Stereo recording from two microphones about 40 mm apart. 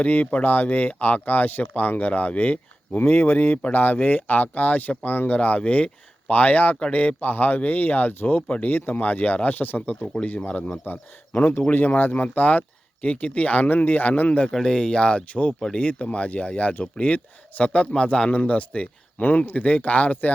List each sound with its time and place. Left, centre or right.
0.0 s speech: left
3.0 s speech: left
3.7 s speech: left
5.4 s speech: left
8.6 s speech: left
11.3 s speech: left
13.7 s speech: left
14.5 s speech: centre
18.3 s speech: left